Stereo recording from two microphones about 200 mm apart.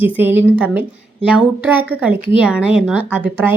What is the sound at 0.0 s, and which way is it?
Speech, 10° right (ahead or behind).